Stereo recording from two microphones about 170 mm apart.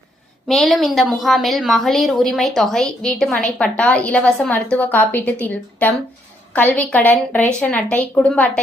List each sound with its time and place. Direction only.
0.4 s a woman's voice: centre (ahead or behind)